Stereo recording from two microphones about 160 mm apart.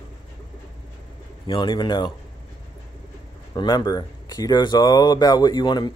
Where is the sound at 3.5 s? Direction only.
25° left (ahead or behind).